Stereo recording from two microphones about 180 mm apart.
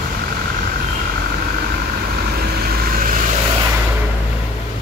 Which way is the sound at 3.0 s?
50° right (ahead or behind).